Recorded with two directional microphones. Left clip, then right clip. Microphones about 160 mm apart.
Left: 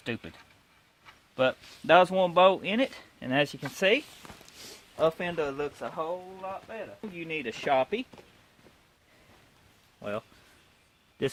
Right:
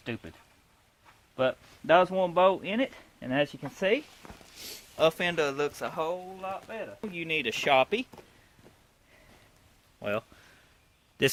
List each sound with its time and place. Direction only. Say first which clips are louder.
0.0 s a man's voice: left 2 dB; 50° left (ahead or behind)
1.4 s a man's voice: left 1 dB; 45° left (ahead or behind)
3.8 s speech: left 2 dB; 40° left (ahead or behind)
4.9 s speech: right 1 dB; 10° left (ahead or behind)
5.2 s speech: right 3 dB; 5° right (ahead or behind)
5.9 s speech: right 2 dB; 30° right (ahead or behind)
6.4 s speech: right 1 dB; 45° right (ahead or behind); by 8.0 s 30° right (ahead or behind)
10.0 s speech: right 3 dB; 20° right (ahead or behind)